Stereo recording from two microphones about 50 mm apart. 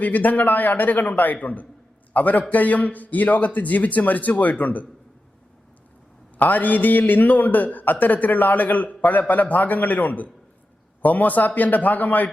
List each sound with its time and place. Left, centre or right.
0.0 s a man's voice: left
6.4 s a man's voice: left